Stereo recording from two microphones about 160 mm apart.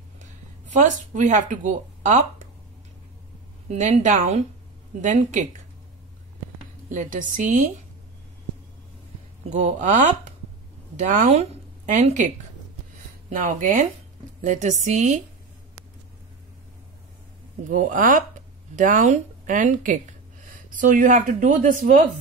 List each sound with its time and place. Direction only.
0.7 s speech: 50° right (ahead or behind)
3.6 s speech: 45° right (ahead or behind)
6.9 s speech: 55° right (ahead or behind)
9.5 s speech: 45° right (ahead or behind)
11.0 s speech: 50° right (ahead or behind)
13.3 s speech: 55° right (ahead or behind)
17.6 s speech: 55° right (ahead or behind)